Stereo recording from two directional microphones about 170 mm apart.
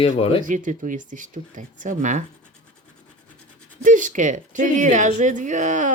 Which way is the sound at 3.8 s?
50° right (ahead or behind).